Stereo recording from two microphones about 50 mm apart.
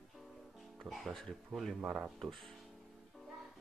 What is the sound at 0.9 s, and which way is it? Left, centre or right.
Speech, right.